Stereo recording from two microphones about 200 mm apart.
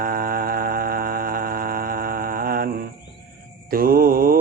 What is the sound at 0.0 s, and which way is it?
Mantra, 45° right (ahead or behind).